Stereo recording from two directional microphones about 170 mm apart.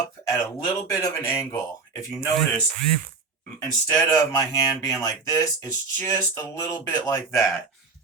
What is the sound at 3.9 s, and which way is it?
Speech, 15° left (ahead or behind).